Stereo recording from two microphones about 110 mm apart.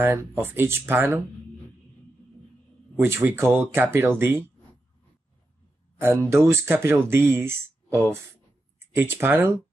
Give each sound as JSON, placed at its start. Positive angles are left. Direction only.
{"t": 0.0, "sound": "speech", "side_deg": -20}
{"t": 3.0, "sound": "speech", "side_deg": -20}
{"t": 5.9, "sound": "speech", "side_deg": -25}